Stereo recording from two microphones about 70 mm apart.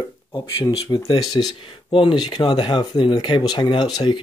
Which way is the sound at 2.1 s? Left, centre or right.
Left.